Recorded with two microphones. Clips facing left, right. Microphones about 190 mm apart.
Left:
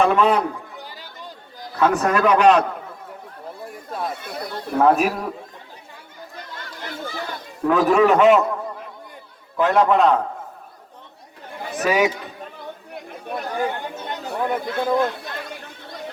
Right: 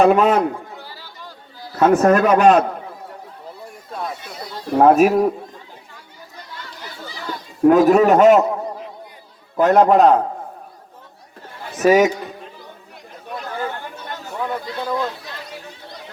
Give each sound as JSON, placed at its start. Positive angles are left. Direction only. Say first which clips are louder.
{"t": 0.0, "sound": "a man's voice", "louder": "right 4 dB", "side_deg": -40}
{"t": 0.8, "sound": "a sound", "louder": "even", "side_deg": 15}
{"t": 1.7, "sound": "a man's voice", "louder": "right 5 dB", "side_deg": -40}
{"t": 4.8, "sound": "a man's voice", "louder": "right 6 dB", "side_deg": -40}
{"t": 7.6, "sound": "a man's voice", "louder": "right 5 dB", "side_deg": -40}
{"t": 9.6, "sound": "a man's voice", "louder": "right 4 dB", "side_deg": -40}
{"t": 11.8, "sound": "a man's voice", "louder": "right 6 dB", "side_deg": -40}
{"t": 12.9, "sound": "chatter", "louder": "left 2 dB", "side_deg": 60}
{"t": 13.5, "sound": "chatter", "louder": "left 2 dB", "side_deg": 15}
{"t": 14.6, "sound": "speech", "louder": "left 3 dB", "side_deg": 55}
{"t": 14.9, "sound": "chatter", "louder": "left 3 dB", "side_deg": 55}